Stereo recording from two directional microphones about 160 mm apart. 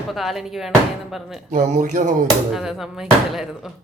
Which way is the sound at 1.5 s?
55° right (ahead or behind).